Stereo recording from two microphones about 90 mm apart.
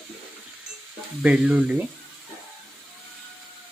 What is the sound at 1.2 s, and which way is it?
Speech, 10° right (ahead or behind).